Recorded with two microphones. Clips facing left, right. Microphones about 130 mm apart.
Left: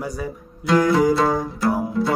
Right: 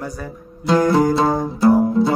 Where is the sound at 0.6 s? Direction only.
30° right (ahead or behind).